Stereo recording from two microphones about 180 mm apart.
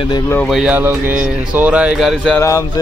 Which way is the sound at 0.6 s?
10° right (ahead or behind).